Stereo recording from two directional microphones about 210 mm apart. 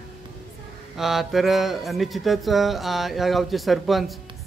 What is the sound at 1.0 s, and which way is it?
Speech, centre (ahead or behind).